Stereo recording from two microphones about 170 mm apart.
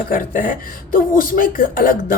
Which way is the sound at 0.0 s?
55° left (ahead or behind).